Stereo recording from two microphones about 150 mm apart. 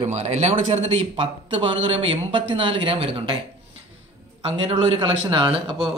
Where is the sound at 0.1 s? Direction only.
50° right (ahead or behind).